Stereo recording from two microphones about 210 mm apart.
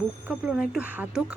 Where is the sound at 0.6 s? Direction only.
5° right (ahead or behind).